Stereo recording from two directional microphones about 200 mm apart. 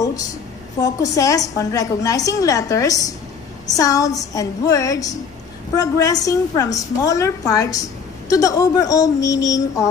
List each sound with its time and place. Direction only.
0.0 s a woman's voice: 15° left (ahead or behind)